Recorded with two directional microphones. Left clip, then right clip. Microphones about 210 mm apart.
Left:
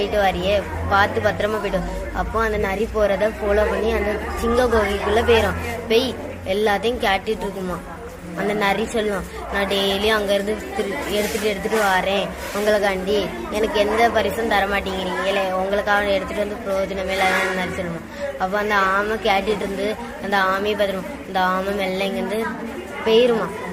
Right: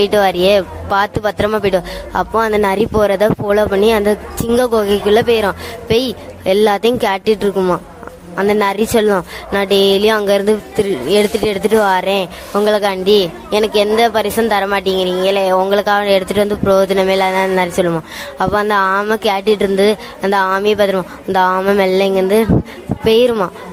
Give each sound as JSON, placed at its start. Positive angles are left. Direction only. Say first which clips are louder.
{"t": 0.0, "sound": "a woman's voice", "louder": "right 8 dB", "side_deg": -50}